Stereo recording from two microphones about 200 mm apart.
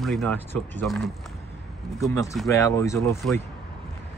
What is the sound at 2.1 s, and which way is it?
Speech, 15° left (ahead or behind).